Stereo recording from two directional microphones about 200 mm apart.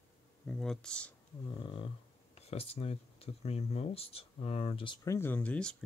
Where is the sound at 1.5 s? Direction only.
25° left (ahead or behind).